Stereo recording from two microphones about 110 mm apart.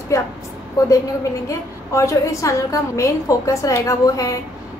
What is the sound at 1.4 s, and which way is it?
A woman's voice, 30° left (ahead or behind).